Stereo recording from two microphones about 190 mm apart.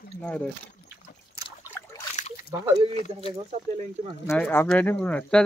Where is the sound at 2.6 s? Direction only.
25° right (ahead or behind).